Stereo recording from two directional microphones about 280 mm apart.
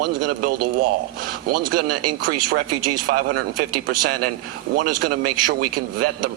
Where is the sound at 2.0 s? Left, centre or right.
Right.